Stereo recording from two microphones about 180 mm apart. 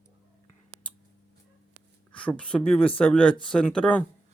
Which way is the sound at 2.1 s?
5° left (ahead or behind).